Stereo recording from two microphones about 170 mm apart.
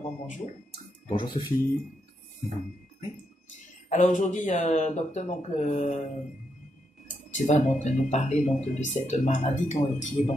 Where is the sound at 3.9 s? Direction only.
45° left (ahead or behind).